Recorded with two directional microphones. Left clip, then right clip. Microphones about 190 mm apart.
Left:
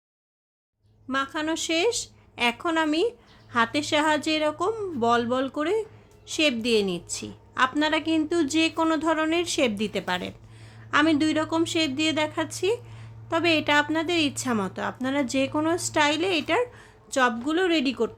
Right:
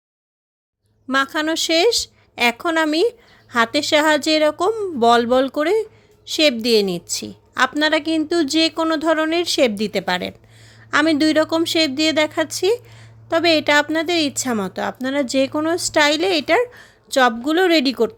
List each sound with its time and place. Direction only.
1.0 s a woman's voice: 45° right (ahead or behind)